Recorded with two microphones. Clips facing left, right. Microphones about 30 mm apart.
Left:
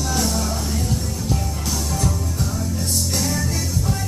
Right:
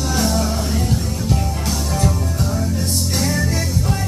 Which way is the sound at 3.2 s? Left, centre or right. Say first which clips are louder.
Right 3 dB; right.